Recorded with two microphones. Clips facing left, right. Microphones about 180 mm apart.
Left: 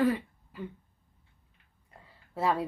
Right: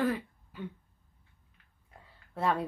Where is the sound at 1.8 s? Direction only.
Centre (ahead or behind).